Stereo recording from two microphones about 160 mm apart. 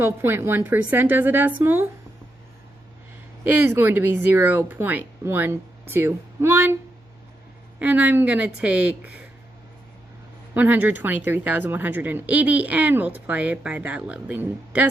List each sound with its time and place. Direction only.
0.0 s speech: 15° right (ahead or behind)
3.4 s speech: 10° right (ahead or behind)
7.8 s speech: 10° right (ahead or behind)
10.5 s speech: 10° right (ahead or behind)